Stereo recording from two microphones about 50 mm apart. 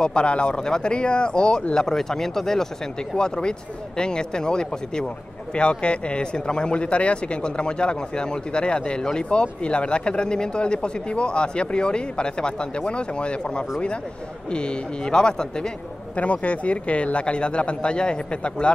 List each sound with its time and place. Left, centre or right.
0.0 s speech: centre